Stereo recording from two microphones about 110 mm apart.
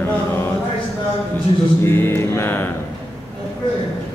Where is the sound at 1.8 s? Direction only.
20° left (ahead or behind).